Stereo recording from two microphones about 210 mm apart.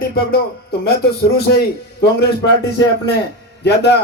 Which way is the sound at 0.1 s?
45° left (ahead or behind).